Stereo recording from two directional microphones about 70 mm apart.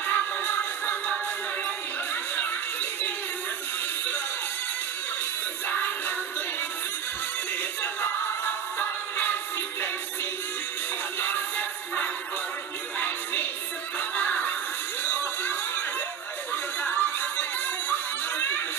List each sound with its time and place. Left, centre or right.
0.0 s music: left
2.3 s music: left
5.7 s music: left
7.8 s music: left
11.1 s music: left
16.8 s music: left